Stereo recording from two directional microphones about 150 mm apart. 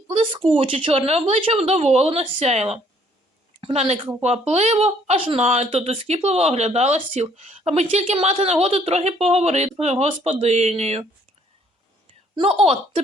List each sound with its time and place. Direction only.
0.1 s a woman's voice: 35° right (ahead or behind)
12.4 s a woman's voice: 40° right (ahead or behind)